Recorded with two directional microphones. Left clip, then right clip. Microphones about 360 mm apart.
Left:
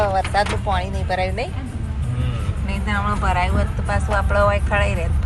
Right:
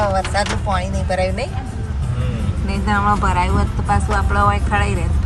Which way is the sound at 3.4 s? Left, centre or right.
Centre.